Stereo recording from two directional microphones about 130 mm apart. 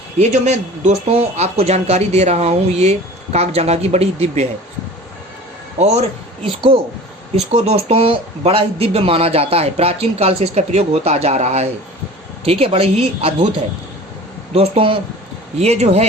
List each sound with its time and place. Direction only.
0.2 s speech: 60° right (ahead or behind)
5.8 s speech: 60° right (ahead or behind)
6.4 s speech: 40° right (ahead or behind)
7.5 s speech: 55° right (ahead or behind)
14.5 s speech: 45° right (ahead or behind)